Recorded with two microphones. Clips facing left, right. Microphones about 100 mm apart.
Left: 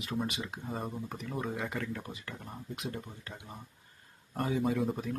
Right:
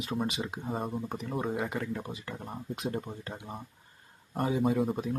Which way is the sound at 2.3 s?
35° right (ahead or behind).